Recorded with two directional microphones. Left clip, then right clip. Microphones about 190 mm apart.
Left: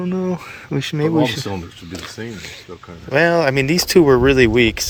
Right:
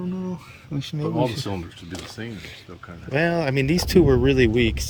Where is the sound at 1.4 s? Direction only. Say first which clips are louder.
Left 4 dB; 45° left (ahead or behind).